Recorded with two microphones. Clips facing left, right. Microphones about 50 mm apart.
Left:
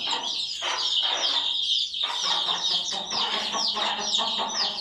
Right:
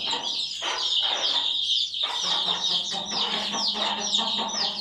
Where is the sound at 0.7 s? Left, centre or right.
Left.